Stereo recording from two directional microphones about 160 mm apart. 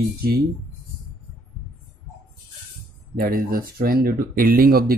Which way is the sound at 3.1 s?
65° right (ahead or behind).